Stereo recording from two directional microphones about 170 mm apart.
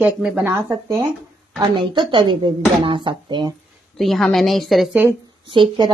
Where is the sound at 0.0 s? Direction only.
5° right (ahead or behind).